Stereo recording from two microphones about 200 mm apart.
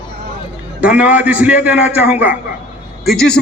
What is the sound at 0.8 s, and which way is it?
A man's voice, 5° right (ahead or behind).